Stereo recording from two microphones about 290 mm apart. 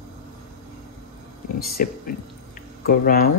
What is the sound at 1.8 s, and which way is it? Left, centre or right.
Speech, left.